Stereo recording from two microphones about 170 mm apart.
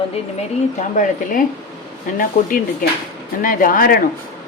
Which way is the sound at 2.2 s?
55° left (ahead or behind).